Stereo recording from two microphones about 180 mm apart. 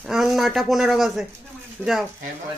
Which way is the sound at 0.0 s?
Centre (ahead or behind).